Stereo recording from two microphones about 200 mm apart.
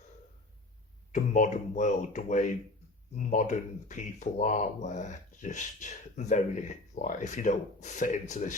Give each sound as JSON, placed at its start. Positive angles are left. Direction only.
{"t": 1.1, "sound": "speech", "side_deg": 40}